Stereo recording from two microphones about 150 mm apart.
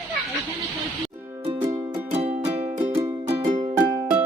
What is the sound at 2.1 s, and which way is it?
Music, 45° right (ahead or behind).